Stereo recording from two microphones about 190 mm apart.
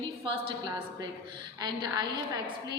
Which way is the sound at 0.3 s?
30° right (ahead or behind).